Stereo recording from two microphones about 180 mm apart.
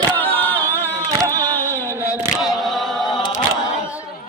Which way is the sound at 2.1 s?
10° right (ahead or behind).